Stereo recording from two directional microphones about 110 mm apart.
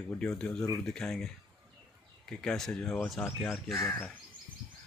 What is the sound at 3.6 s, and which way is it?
Speech, 20° left (ahead or behind).